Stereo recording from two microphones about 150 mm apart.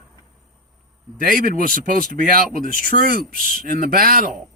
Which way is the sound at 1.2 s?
75° right (ahead or behind).